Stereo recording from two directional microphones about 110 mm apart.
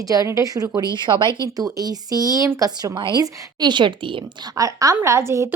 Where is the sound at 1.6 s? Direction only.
35° right (ahead or behind); by 4.5 s 50° right (ahead or behind).